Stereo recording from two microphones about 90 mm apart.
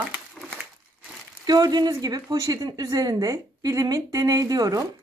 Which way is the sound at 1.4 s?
50° right (ahead or behind).